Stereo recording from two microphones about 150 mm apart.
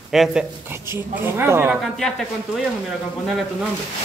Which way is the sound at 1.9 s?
5° left (ahead or behind).